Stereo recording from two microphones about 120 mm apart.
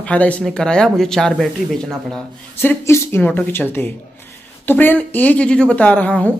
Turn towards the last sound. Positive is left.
turn(degrees=10)  # may be behind; listen again after turning